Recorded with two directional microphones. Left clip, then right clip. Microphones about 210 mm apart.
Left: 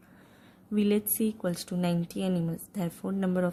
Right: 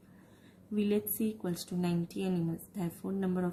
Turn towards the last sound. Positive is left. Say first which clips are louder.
# left 6 dB
turn(degrees=45)  # may be behind; listen again after turning